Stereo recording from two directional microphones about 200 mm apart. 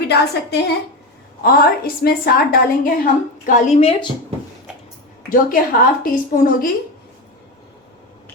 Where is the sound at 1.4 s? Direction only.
45° left (ahead or behind).